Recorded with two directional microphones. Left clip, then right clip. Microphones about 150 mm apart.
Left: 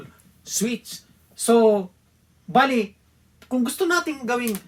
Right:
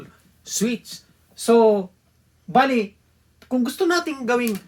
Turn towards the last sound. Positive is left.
turn(degrees=-20)  # may be behind; listen again after turning